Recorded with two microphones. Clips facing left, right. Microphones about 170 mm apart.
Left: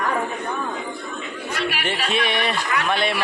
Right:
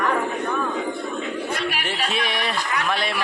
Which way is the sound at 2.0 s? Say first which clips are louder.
Left 4 dB; centre (ahead or behind).